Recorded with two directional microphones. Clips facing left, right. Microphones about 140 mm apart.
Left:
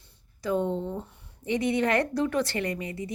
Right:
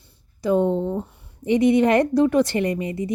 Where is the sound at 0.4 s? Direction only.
20° right (ahead or behind).